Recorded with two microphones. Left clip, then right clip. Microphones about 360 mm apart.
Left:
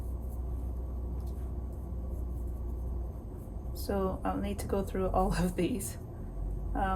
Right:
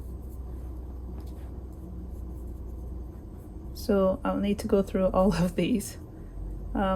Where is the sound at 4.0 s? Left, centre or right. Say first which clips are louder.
Right 7 dB; centre.